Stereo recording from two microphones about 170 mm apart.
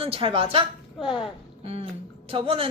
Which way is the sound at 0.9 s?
30° left (ahead or behind).